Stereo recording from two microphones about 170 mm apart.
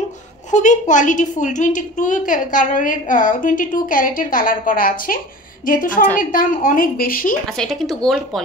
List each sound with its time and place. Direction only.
0.5 s a woman's voice: 45° left (ahead or behind)
7.4 s speech: centre (ahead or behind)